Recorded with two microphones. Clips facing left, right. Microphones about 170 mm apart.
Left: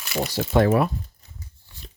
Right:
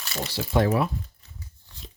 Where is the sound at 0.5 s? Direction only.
60° left (ahead or behind).